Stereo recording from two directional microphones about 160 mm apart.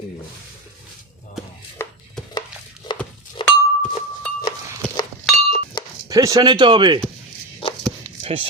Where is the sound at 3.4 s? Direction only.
30° left (ahead or behind).